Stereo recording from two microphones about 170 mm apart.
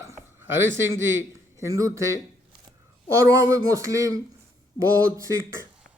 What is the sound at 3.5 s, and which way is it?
Speech, 20° right (ahead or behind).